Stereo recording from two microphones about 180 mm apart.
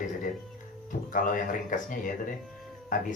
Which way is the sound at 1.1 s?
45° left (ahead or behind).